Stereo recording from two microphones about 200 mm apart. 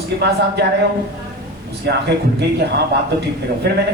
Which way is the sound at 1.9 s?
55° right (ahead or behind).